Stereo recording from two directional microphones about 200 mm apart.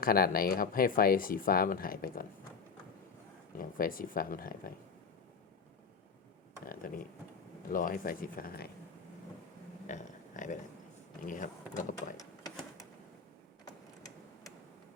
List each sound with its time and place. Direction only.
0.0 s speech: 45° left (ahead or behind)
3.6 s speech: 45° left (ahead or behind)
6.7 s speech: 45° left (ahead or behind)
9.8 s a sound: 40° left (ahead or behind)
11.2 s speech: 40° left (ahead or behind)
12.1 s a sound: 15° left (ahead or behind)